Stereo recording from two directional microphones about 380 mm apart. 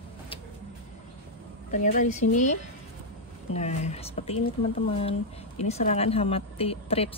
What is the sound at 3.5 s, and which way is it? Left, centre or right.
Speech, centre.